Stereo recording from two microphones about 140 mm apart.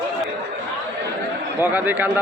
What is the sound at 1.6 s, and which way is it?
Speech, 15° right (ahead or behind).